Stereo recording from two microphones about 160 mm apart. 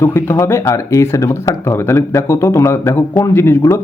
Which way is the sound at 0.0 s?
15° left (ahead or behind).